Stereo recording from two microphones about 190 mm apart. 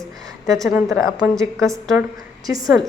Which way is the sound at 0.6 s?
Centre (ahead or behind).